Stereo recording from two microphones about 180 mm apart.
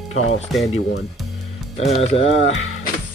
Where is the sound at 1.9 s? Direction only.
35° left (ahead or behind).